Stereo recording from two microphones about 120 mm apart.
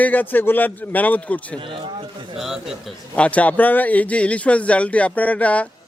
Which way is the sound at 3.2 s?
10° left (ahead or behind).